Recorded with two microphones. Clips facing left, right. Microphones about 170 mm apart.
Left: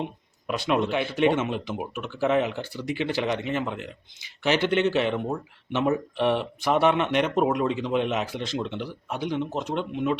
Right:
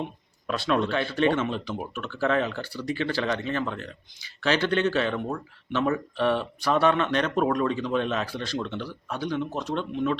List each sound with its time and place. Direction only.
0.0 s speech: 15° left (ahead or behind)